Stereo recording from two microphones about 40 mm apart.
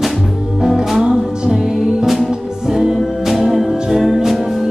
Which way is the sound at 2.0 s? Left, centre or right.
Centre.